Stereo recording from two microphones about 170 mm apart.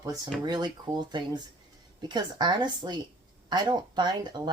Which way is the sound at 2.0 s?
25° right (ahead or behind).